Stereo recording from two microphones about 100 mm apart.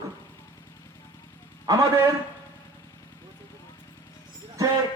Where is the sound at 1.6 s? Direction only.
35° right (ahead or behind).